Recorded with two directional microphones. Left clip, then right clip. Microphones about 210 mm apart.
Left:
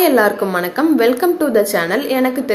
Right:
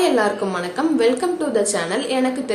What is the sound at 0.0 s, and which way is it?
A woman's voice, 30° left (ahead or behind).